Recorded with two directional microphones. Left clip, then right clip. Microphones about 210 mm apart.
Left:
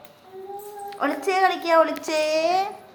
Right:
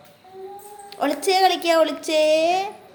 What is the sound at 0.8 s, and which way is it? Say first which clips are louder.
A woman's voice: right 3 dB; 25° right (ahead or behind).